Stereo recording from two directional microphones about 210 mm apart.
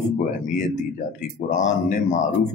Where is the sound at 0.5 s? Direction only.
35° left (ahead or behind).